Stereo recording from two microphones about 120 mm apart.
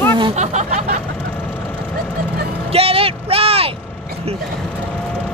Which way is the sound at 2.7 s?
55° right (ahead or behind).